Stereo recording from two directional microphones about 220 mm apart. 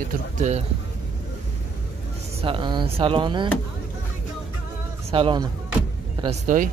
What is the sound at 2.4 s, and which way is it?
Speech, 20° right (ahead or behind).